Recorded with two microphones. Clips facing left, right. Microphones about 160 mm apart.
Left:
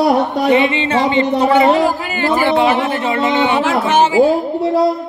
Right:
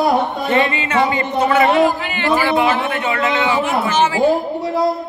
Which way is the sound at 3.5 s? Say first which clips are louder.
Left 3 dB; 90° left.